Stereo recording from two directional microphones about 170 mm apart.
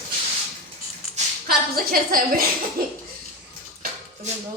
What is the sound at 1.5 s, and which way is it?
A woman's voice, 60° right (ahead or behind).